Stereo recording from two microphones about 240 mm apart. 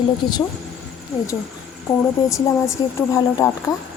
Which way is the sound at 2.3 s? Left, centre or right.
Centre.